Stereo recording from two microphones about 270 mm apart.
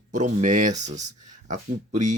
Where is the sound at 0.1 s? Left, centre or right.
Right.